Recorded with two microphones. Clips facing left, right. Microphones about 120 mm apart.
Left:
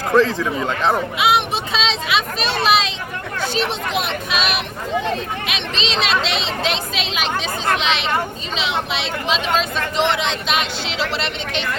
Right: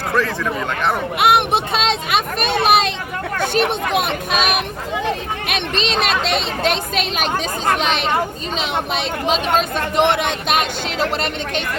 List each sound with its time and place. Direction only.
0.3 s a man's voice: 20° left (ahead or behind)
1.2 s speech: 55° right (ahead or behind)